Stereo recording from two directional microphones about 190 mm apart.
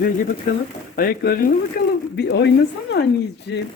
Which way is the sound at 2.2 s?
65° left (ahead or behind).